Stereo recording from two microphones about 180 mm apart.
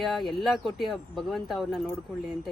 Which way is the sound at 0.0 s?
Centre (ahead or behind).